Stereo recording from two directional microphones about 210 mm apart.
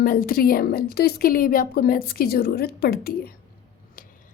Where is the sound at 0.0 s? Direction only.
45° left (ahead or behind).